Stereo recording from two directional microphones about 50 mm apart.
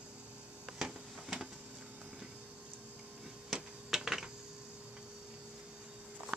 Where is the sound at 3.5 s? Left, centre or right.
Centre.